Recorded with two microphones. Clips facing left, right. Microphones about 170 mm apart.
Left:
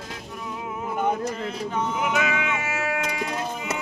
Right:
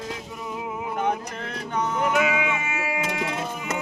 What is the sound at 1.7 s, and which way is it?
Music, 5° left (ahead or behind).